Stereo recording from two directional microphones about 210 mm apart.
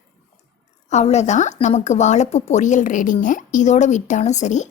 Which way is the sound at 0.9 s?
30° left (ahead or behind).